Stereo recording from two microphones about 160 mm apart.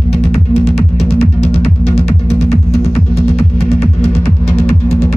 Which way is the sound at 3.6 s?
40° left (ahead or behind).